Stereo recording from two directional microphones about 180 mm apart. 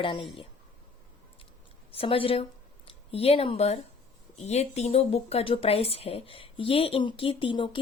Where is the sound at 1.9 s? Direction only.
30° left (ahead or behind).